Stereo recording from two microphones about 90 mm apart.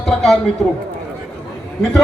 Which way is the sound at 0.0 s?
5° left (ahead or behind).